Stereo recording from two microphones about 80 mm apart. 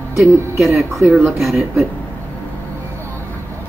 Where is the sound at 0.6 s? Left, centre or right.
Centre.